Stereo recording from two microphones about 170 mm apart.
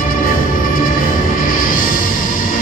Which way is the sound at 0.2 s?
55° left (ahead or behind).